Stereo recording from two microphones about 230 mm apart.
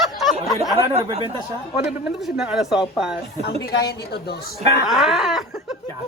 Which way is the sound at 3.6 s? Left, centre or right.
Left.